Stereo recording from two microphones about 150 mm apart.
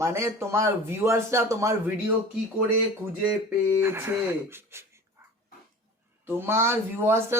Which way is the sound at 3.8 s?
15° right (ahead or behind).